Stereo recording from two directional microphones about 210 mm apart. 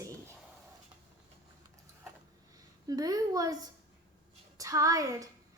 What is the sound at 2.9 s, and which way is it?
Speech, 15° right (ahead or behind).